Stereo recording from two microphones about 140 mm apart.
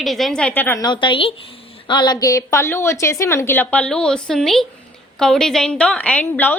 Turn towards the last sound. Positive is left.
turn(degrees=10)  # may be behind; listen again after turning